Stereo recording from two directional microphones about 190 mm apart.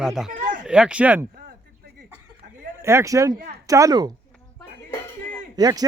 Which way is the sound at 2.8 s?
15° right (ahead or behind).